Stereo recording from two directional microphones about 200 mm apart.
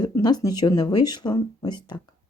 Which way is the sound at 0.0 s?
20° left (ahead or behind).